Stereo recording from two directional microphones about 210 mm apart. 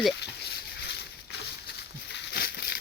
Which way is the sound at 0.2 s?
55° left (ahead or behind).